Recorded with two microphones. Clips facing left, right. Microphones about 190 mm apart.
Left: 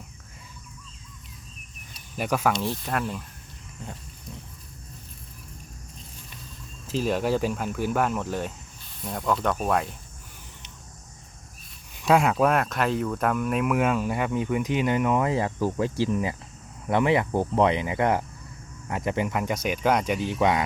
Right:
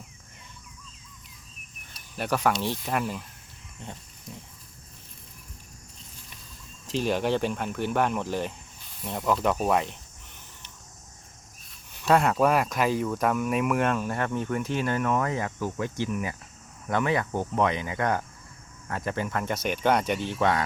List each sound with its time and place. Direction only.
1.9 s cricket: 5° left (ahead or behind)
2.5 s speech: centre (ahead or behind)
6.8 s speech: centre (ahead or behind)
12.0 s speech: centre (ahead or behind)
15.3 s speech: 30° left (ahead or behind)